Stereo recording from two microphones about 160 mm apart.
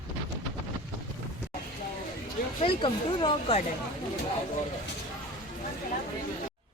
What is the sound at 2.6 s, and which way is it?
Speech, 30° left (ahead or behind).